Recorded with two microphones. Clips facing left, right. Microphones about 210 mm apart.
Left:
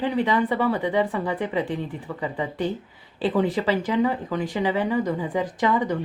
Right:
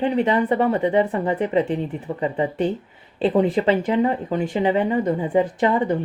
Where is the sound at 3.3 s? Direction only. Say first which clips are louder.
Right 4 dB; 25° right (ahead or behind).